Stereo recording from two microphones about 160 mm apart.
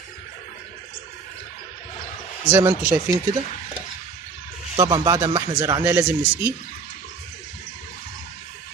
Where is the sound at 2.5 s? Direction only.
15° right (ahead or behind).